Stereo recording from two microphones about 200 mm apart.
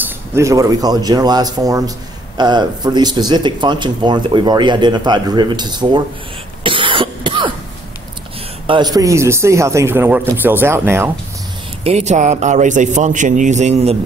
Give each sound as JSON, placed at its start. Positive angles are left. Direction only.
{"t": 0.0, "sound": "speech", "side_deg": -15}
{"t": 6.6, "sound": "cough", "side_deg": -25}
{"t": 8.6, "sound": "speech", "side_deg": -20}
{"t": 11.8, "sound": "a man's voice", "side_deg": -35}